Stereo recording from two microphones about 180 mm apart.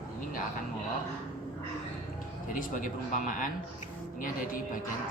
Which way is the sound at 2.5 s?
50° left (ahead or behind).